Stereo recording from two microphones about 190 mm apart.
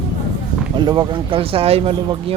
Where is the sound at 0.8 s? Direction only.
25° right (ahead or behind).